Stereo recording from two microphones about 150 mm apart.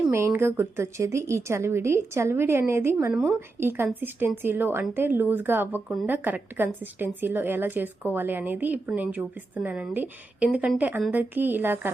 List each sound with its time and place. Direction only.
0.1 s a woman's voice: 15° right (ahead or behind)
3.1 s speech: 5° right (ahead or behind)
3.6 s a woman's voice: 15° right (ahead or behind)